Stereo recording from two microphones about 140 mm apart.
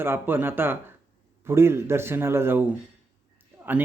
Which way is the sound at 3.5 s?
20° right (ahead or behind).